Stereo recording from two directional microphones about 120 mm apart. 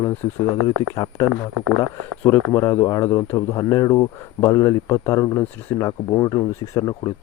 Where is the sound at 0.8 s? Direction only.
30° left (ahead or behind).